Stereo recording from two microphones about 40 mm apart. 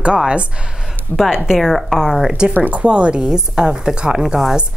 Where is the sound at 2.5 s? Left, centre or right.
Right.